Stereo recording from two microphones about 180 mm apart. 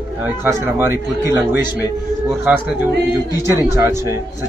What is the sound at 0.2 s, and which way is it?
A man's voice, 15° right (ahead or behind).